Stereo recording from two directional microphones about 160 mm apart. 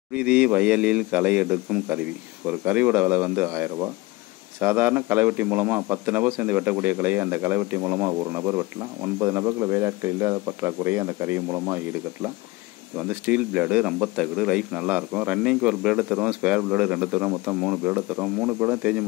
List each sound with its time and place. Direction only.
0.1 s speech: 5° right (ahead or behind)